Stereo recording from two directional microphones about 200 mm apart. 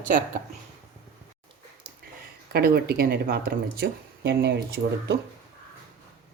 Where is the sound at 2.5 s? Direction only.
50° right (ahead or behind).